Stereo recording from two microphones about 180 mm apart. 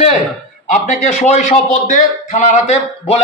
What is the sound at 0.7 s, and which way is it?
A man's voice, 40° left (ahead or behind).